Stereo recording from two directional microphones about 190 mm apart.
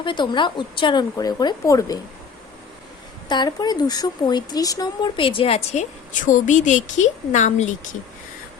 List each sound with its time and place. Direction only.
0.0 s speech: 25° left (ahead or behind)
3.2 s speech: 20° left (ahead or behind)
6.2 s a woman's voice: 45° left (ahead or behind)